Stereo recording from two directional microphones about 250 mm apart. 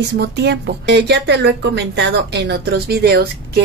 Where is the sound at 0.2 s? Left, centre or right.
Right.